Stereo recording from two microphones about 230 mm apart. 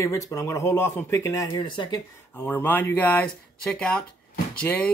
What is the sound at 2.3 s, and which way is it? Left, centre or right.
Speech, centre.